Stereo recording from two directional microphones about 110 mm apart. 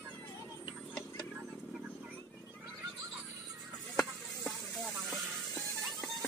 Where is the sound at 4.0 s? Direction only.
Centre (ahead or behind).